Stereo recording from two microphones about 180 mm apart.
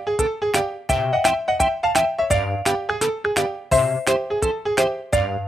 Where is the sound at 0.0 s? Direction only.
Centre (ahead or behind).